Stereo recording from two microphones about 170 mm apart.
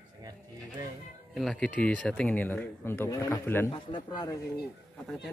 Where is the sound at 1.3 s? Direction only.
5° left (ahead or behind).